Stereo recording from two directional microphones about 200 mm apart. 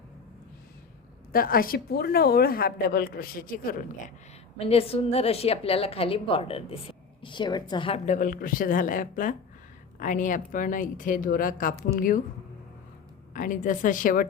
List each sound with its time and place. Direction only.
1.3 s a woman's voice: 45° left (ahead or behind)
4.5 s a woman's voice: 30° left (ahead or behind)
13.3 s a woman's voice: 40° left (ahead or behind)